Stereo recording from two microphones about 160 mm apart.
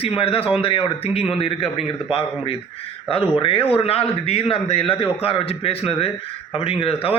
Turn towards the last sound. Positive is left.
turn(degrees=35)  # may be behind; listen again after turning